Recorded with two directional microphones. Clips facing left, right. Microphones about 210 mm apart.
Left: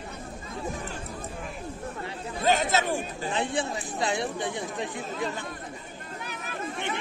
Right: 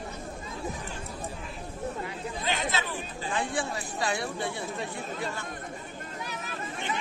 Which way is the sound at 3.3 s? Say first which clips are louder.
Left 2 dB; 20° left (ahead or behind).